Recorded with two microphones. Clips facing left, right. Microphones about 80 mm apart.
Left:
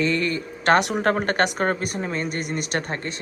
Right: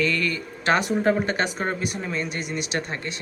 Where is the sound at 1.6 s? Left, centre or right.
Left.